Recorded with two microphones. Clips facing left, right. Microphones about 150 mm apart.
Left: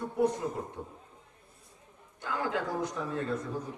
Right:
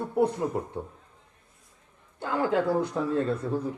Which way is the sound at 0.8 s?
75° right (ahead or behind).